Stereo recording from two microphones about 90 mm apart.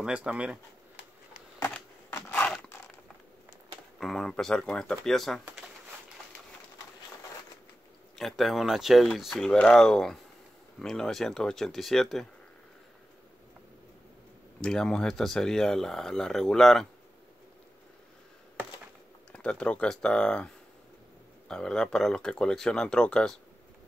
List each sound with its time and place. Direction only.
0.0 s speech: 10° right (ahead or behind)
1.6 s a sound: 20° left (ahead or behind)
4.0 s speech: 5° left (ahead or behind)
8.2 s speech: centre (ahead or behind)
9.5 s speech: 10° left (ahead or behind)
14.6 s speech: 5° left (ahead or behind)
19.3 s speech: 10° left (ahead or behind)